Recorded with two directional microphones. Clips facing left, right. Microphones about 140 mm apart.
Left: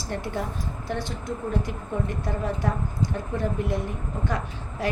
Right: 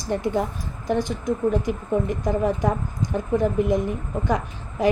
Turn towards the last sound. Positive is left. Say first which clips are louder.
# right 4 dB
turn(degrees=-15)  # may be behind; listen again after turning